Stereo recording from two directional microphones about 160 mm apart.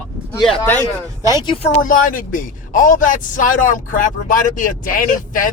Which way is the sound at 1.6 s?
55° left (ahead or behind).